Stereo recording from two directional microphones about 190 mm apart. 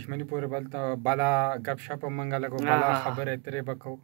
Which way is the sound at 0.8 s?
5° left (ahead or behind).